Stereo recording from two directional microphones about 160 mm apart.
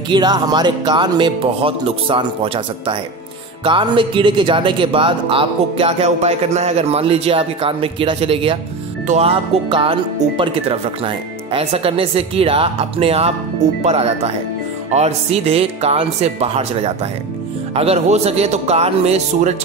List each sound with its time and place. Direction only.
0.1 s speech: 25° right (ahead or behind); by 19.5 s 45° right (ahead or behind)